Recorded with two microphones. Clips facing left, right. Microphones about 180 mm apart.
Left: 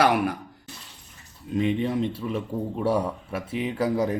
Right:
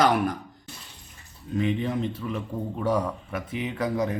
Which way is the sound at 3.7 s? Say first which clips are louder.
Left 2 dB; 10° left (ahead or behind).